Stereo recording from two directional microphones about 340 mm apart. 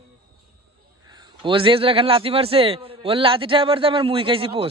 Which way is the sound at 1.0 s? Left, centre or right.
Centre.